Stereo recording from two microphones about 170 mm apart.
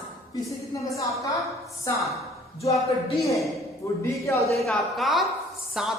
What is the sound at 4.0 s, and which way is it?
Speech, 15° left (ahead or behind).